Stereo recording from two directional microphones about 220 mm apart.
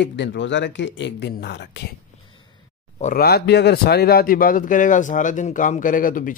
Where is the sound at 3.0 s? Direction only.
40° left (ahead or behind).